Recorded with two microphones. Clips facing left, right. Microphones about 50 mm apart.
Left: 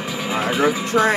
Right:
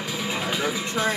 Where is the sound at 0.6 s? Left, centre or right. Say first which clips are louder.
Left 11 dB; left.